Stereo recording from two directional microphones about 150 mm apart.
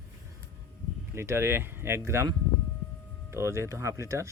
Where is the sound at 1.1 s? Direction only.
15° right (ahead or behind).